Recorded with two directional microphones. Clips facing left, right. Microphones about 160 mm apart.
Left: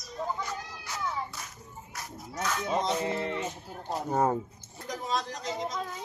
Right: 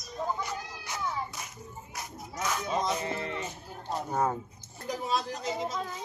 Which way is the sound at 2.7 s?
20° left (ahead or behind).